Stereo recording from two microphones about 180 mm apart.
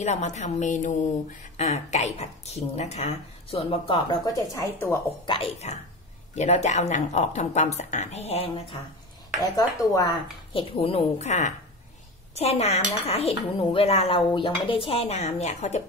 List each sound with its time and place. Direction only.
0.0 s speech: 40° left (ahead or behind); by 4.9 s 15° left (ahead or behind)
5.2 s speech: 30° left (ahead or behind)
9.4 s speech: 20° left (ahead or behind); by 15.8 s 40° left (ahead or behind)